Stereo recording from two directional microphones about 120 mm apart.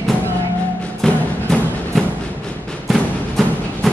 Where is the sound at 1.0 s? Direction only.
5° left (ahead or behind).